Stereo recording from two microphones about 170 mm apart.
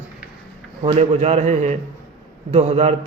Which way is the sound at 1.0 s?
40° right (ahead or behind).